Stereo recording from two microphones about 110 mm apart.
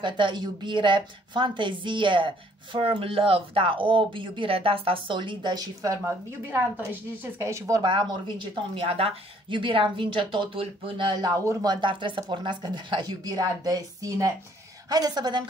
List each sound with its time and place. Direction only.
0.0 s a woman's voice: 45° right (ahead or behind)
6.5 s a woman's voice: 20° right (ahead or behind)
7.8 s a woman's voice: 45° right (ahead or behind)
8.8 s a woman's voice: 65° right (ahead or behind); by 15.4 s 40° right (ahead or behind)